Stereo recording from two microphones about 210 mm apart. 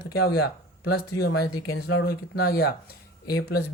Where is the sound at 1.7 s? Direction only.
70° left (ahead or behind).